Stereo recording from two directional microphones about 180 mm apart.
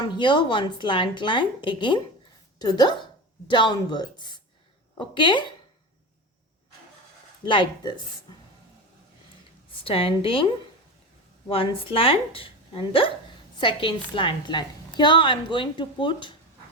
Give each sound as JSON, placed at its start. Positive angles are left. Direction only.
{"t": 0.2, "sound": "a woman's voice", "side_deg": 25}
{"t": 7.4, "sound": "a woman's voice", "side_deg": 25}
{"t": 9.8, "sound": "a woman's voice", "side_deg": 30}